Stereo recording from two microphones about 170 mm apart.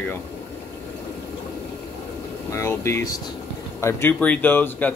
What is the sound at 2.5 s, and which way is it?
Speech, 15° left (ahead or behind).